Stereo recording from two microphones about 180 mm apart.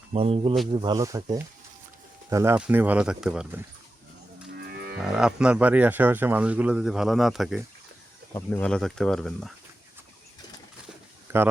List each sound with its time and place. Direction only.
0.1 s speech: 30° right (ahead or behind); by 3.6 s 5° right (ahead or behind)
4.5 s livestock: 65° right (ahead or behind)
4.9 s speech: 5° right (ahead or behind)
8.3 s speech: 15° left (ahead or behind)
11.3 s speech: 15° right (ahead or behind)